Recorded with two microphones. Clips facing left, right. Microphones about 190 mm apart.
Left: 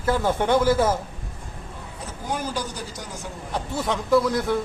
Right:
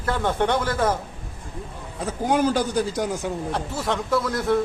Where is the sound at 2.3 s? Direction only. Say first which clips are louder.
Right 8 dB; 70° right (ahead or behind).